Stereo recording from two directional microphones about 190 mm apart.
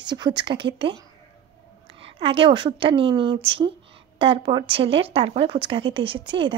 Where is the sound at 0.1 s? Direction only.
20° right (ahead or behind).